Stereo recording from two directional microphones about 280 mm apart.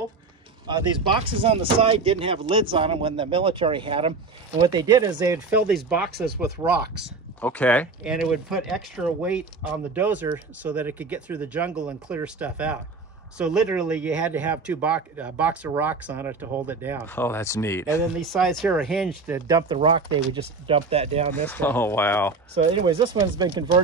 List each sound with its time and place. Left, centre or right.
0.7 s speech: centre
7.4 s speech: centre
17.0 s speech: centre; by 21.5 s right
21.5 s speech: centre
22.8 s speech: centre